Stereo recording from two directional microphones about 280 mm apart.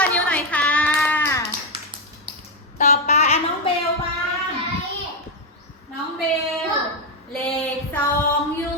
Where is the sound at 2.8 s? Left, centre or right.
Left.